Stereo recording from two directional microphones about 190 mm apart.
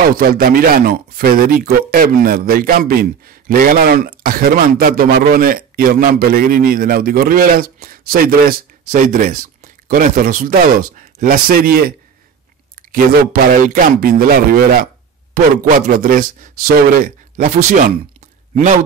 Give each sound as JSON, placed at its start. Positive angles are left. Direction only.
{"t": 0.0, "sound": "speech", "side_deg": -50}
{"t": 12.9, "sound": "speech", "side_deg": -50}